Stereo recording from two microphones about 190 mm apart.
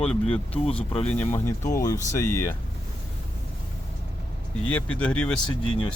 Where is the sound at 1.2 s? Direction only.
10° left (ahead or behind).